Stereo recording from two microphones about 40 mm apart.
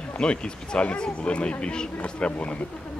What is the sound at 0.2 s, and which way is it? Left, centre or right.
Speech, left.